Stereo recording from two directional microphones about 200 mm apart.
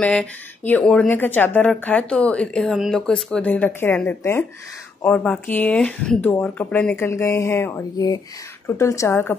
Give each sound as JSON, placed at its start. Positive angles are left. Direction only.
{"t": 0.0, "sound": "speech", "side_deg": 5}